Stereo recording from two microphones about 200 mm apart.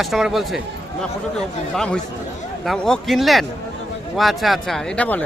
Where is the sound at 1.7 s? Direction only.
5° left (ahead or behind).